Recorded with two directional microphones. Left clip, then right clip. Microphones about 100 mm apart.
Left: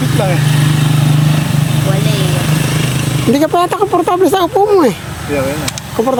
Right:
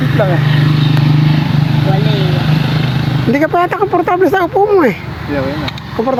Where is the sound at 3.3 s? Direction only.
45° left (ahead or behind).